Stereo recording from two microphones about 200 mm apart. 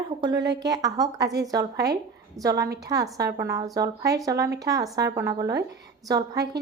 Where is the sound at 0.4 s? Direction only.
60° right (ahead or behind).